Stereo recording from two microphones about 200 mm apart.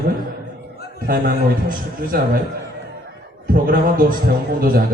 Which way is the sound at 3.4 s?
45° right (ahead or behind).